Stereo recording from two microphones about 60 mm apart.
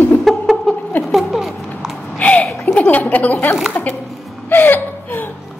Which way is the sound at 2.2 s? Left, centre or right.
Left.